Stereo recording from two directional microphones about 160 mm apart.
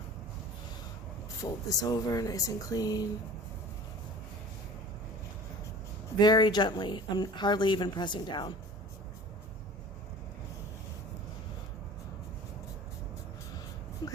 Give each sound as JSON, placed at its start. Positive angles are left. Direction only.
{"t": 1.4, "sound": "speech", "side_deg": 20}
{"t": 6.1, "sound": "speech", "side_deg": 25}
{"t": 14.0, "sound": "a sound", "side_deg": 25}